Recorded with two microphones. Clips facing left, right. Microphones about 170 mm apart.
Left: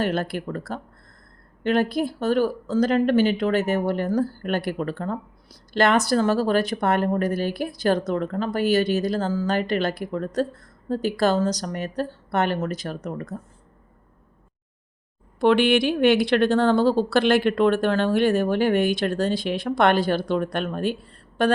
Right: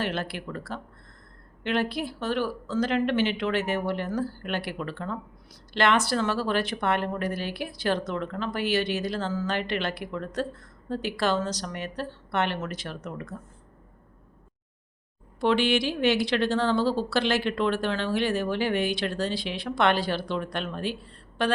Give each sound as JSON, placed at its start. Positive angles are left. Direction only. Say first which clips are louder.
{"t": 0.0, "sound": "a woman's voice", "louder": "left 6 dB", "side_deg": 45}
{"t": 15.4, "sound": "a woman's voice", "louder": "left 5 dB", "side_deg": 60}